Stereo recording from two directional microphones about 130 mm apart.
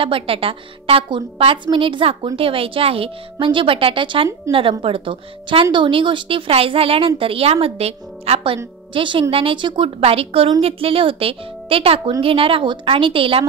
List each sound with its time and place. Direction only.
0.0 s a woman's voice: 45° right (ahead or behind)
8.9 s a woman's voice: 40° right (ahead or behind)